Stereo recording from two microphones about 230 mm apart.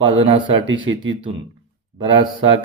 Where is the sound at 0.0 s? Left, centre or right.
Right.